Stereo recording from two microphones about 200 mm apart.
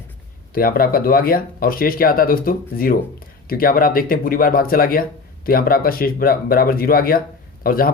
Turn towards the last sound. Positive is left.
turn(degrees=45)  # may be behind; listen again after turning